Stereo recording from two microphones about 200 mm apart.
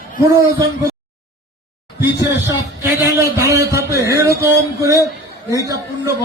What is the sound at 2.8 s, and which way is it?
A man's voice, 15° right (ahead or behind).